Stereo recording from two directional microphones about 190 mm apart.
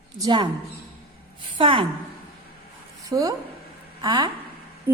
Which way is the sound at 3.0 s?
20° right (ahead or behind).